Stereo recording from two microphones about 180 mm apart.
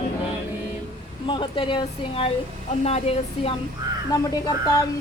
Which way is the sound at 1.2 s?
30° left (ahead or behind).